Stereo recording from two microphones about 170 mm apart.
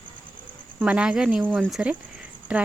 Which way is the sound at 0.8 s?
5° right (ahead or behind).